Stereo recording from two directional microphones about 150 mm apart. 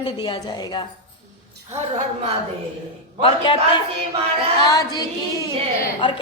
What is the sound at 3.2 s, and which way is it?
A woman's voice, 30° left (ahead or behind).